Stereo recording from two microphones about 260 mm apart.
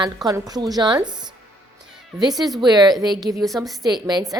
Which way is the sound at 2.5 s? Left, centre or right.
Centre.